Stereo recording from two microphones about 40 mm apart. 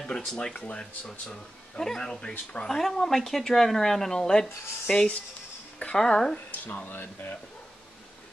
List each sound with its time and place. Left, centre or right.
0.0 s speech: centre
2.7 s speech: centre
6.3 s speech: left